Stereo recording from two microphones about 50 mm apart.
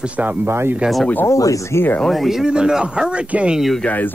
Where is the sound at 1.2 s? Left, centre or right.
Left.